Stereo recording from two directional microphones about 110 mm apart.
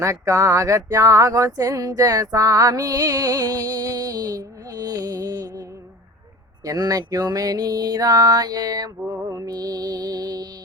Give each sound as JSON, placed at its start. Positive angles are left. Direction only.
{"t": 0.0, "sound": "speech", "side_deg": -25}
{"t": 6.7, "sound": "speech", "side_deg": -35}